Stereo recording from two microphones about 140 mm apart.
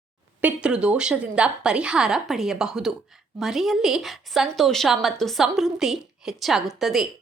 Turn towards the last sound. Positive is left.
turn(degrees=0)  # may be behind; listen again after turning